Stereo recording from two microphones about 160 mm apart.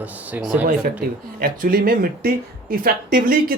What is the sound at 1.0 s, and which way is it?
Speech, 75° right (ahead or behind).